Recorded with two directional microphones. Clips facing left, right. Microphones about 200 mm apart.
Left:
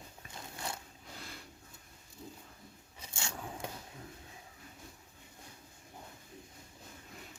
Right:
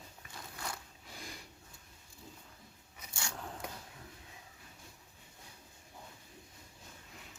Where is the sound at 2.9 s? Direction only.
25° left (ahead or behind).